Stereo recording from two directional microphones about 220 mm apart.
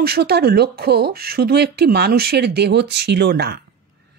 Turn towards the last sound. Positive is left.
turn(degrees=-50)  # may be behind; listen again after turning